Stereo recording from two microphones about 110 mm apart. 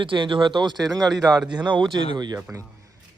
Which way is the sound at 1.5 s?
45° right (ahead or behind).